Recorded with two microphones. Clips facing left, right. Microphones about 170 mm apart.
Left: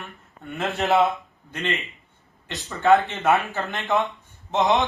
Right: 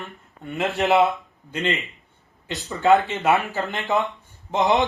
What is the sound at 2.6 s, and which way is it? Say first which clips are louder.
Speech: even; 20° right (ahead or behind).